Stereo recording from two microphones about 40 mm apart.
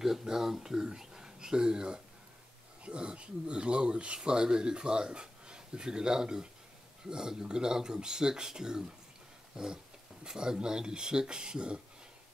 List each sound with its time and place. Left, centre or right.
0.0 s speech: centre